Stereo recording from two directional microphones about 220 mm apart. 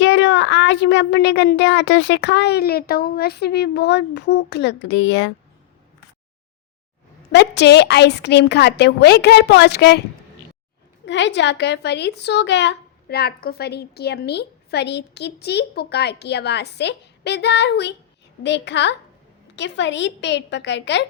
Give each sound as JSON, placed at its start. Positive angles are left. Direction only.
{"t": 0.0, "sound": "a woman's voice", "side_deg": 55}
{"t": 7.3, "sound": "a woman's voice", "side_deg": 50}
{"t": 11.0, "sound": "a woman's voice", "side_deg": 55}